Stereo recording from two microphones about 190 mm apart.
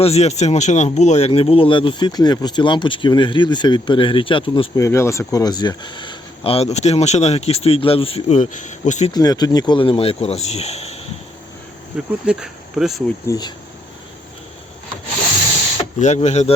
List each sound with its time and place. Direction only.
0.0 s speech: 35° left (ahead or behind)
4.8 s speech: 15° left (ahead or behind); by 9.1 s 40° left (ahead or behind)
9.1 s speech: 20° left (ahead or behind)
12.2 s speech: 5° right (ahead or behind)
13.2 s speech: 20° left (ahead or behind)
16.0 s speech: 40° left (ahead or behind)